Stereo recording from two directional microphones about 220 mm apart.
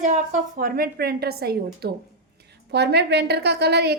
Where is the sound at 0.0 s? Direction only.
35° right (ahead or behind).